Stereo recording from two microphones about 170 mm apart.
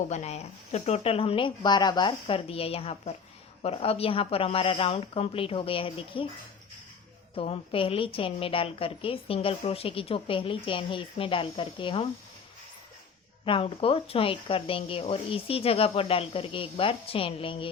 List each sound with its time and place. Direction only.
0.1 s a woman's voice: 40° left (ahead or behind)
7.3 s a woman's voice: 35° left (ahead or behind)
13.4 s a woman's voice: 30° left (ahead or behind)